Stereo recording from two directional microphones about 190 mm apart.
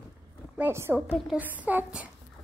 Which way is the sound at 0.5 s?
10° right (ahead or behind).